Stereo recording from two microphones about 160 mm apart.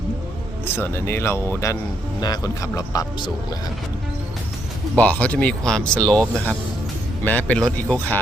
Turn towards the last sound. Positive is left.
turn(degrees=5)  # may be behind; listen again after turning